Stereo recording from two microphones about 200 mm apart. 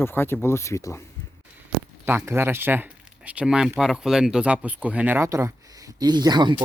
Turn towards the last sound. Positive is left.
turn(degrees=-20)  # may be behind; listen again after turning